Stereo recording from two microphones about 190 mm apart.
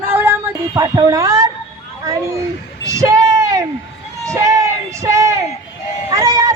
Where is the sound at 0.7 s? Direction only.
20° right (ahead or behind).